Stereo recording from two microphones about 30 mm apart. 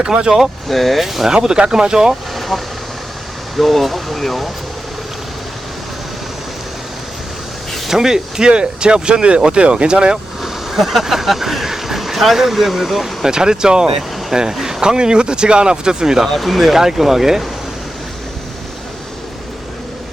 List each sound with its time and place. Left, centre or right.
0.0 s speech: right
0.7 s speech: centre
1.0 s speech: centre
1.3 s speech: right
1.8 s speech: right
2.3 s vehicle: centre
3.6 s speech: centre
7.9 s speech: centre
8.4 s speech: right
10.4 s speech: centre
13.2 s speech: right
14.3 s speech: centre
14.8 s speech: right
16.3 s speech: centre